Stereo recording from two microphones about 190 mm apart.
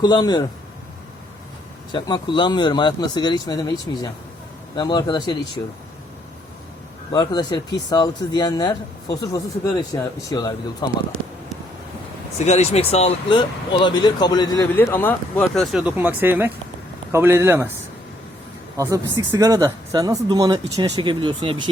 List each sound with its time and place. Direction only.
0.0 s speech: 20° left (ahead or behind)
1.9 s speech: 25° left (ahead or behind)
7.1 s speech: 20° left (ahead or behind)
12.4 s a man's voice: 35° left (ahead or behind); by 17.7 s 10° right (ahead or behind)
18.8 s speech: 15° right (ahead or behind)